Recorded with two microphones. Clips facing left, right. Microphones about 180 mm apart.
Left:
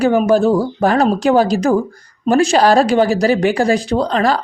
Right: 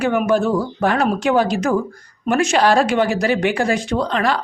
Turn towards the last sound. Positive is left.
turn(degrees=35)  # may be behind; listen again after turning